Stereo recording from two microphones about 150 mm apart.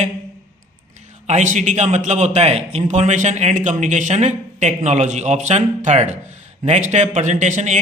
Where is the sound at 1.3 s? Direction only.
55° right (ahead or behind).